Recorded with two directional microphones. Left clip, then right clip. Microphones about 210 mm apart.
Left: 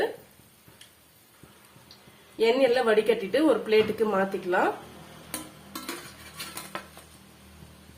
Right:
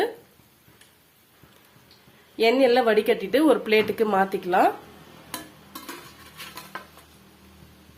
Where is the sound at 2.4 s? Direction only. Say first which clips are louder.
Right 3 dB; 45° right (ahead or behind).